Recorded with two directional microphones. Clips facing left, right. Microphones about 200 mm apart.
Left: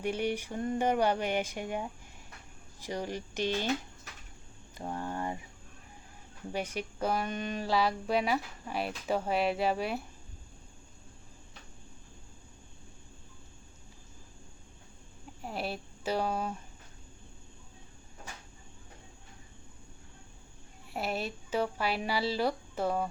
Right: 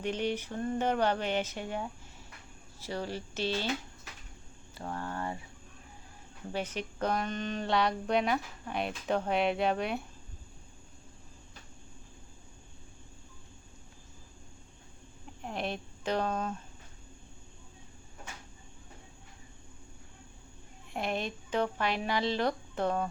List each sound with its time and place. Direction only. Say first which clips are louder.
0.0 s speech: left 1 dB; 10° left (ahead or behind)
4.8 s speech: left 1 dB; 15° left (ahead or behind)
6.5 s speech: even; 10° left (ahead or behind)
15.4 s speech: right 1 dB; 5° left (ahead or behind)
20.9 s speech: right 1 dB; 5° left (ahead or behind)